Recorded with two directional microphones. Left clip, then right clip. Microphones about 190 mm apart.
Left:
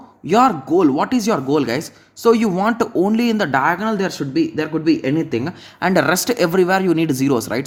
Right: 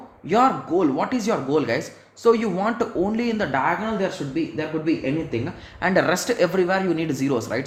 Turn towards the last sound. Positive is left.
turn(degrees=45)  # may be behind; listen again after turning